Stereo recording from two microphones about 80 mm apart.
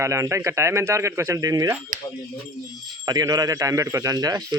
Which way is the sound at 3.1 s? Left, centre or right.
Right.